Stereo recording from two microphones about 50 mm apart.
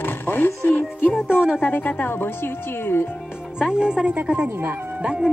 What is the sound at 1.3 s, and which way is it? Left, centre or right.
Speech, centre.